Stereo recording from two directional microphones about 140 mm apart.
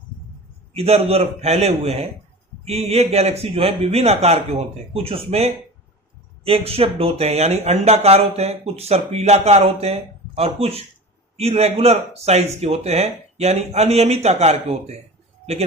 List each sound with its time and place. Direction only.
0.7 s speech: 45° right (ahead or behind)